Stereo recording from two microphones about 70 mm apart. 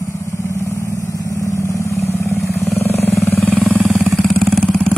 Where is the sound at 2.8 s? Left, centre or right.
Left.